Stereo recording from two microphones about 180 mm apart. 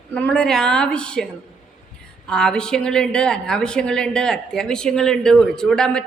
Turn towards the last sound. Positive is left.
turn(degrees=5)  # may be behind; listen again after turning